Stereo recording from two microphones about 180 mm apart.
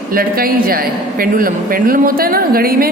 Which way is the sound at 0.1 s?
55° right (ahead or behind).